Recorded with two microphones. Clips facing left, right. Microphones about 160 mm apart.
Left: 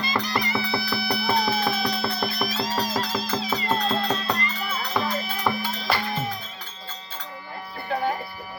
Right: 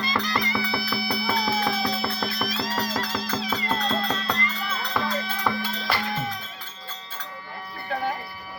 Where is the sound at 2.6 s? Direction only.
Centre (ahead or behind).